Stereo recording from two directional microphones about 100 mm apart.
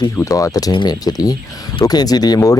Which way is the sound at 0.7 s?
45° left (ahead or behind).